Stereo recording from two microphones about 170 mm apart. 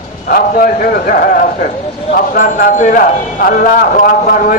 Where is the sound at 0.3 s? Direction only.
55° left (ahead or behind).